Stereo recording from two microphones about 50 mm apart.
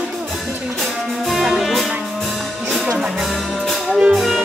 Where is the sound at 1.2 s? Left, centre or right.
Centre.